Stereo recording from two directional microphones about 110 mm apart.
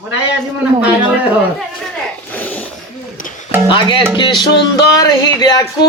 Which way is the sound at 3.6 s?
50° left (ahead or behind).